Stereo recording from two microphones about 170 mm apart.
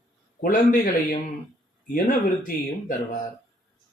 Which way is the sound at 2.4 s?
55° left (ahead or behind).